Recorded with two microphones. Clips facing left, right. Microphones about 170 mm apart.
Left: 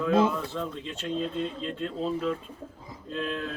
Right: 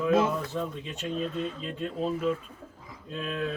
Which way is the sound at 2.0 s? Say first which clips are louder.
Right 1 dB; 5° right (ahead or behind).